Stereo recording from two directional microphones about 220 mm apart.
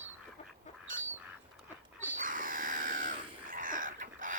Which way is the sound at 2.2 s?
40° right (ahead or behind).